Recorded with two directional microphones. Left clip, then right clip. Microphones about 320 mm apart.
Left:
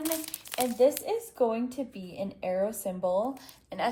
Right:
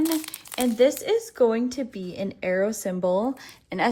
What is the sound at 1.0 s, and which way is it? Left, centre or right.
Speech, right.